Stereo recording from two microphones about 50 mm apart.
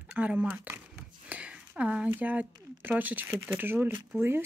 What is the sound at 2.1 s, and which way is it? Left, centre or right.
Speech, right.